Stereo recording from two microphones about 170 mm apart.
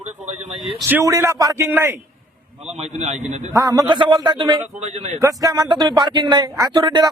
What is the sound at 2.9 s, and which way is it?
Speech, 45° right (ahead or behind).